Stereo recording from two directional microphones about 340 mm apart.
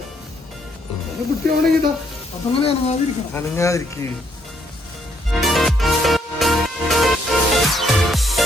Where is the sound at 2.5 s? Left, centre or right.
Centre.